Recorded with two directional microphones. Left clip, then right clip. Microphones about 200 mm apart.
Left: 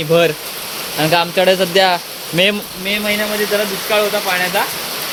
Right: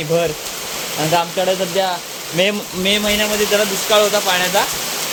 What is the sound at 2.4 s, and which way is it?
Speech, 15° left (ahead or behind).